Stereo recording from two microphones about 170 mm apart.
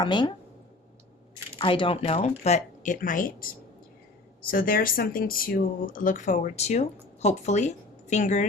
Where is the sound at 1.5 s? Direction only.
30° left (ahead or behind).